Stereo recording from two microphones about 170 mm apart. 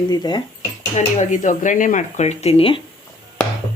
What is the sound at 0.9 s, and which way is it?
Speech, 45° left (ahead or behind).